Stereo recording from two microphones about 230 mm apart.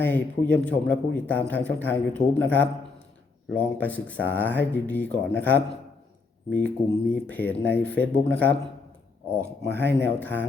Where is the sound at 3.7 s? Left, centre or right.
Centre.